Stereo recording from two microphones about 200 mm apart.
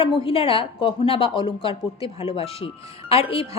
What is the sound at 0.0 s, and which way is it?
Speech, 25° left (ahead or behind).